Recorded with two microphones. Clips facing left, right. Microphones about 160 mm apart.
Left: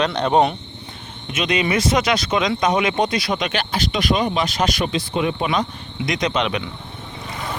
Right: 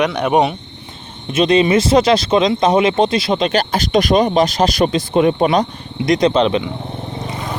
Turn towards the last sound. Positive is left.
turn(degrees=-30)  # may be behind; listen again after turning